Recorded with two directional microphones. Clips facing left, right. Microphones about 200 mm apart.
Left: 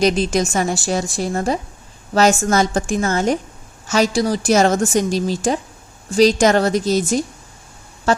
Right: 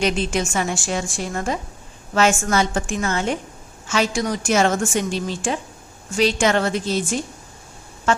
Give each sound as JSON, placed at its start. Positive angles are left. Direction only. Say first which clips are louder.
{"t": 0.0, "sound": "a woman's voice", "louder": "left 5 dB", "side_deg": 40}